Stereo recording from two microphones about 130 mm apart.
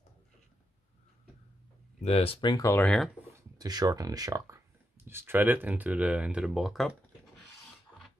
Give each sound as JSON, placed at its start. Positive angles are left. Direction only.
{"t": 2.0, "sound": "speech", "side_deg": 45}
{"t": 2.8, "sound": "speech", "side_deg": 5}
{"t": 3.3, "sound": "speech", "side_deg": -30}